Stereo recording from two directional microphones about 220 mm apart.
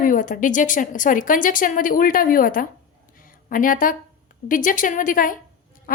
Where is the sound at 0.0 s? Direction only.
35° left (ahead or behind).